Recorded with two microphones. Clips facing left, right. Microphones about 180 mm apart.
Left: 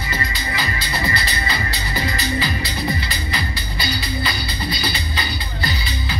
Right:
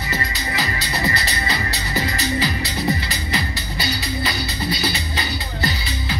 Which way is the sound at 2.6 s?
45° right (ahead or behind).